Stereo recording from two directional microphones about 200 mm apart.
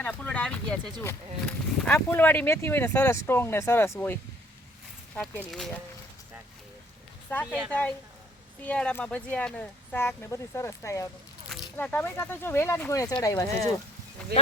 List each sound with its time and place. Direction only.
0.0 s speech: 5° left (ahead or behind)
7.3 s speech: 10° left (ahead or behind)
11.4 s speech: 5° left (ahead or behind)